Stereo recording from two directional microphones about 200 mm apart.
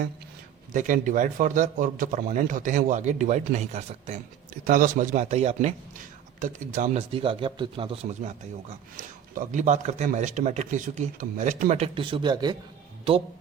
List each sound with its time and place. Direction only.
0.7 s a man's voice: 40° right (ahead or behind); by 7.9 s 25° right (ahead or behind)
9.0 s speech: 40° right (ahead or behind); by 12.5 s 20° right (ahead or behind)